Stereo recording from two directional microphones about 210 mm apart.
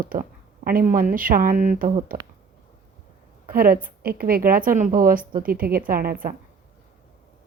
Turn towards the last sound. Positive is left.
turn(degrees=-45)  # may be behind; listen again after turning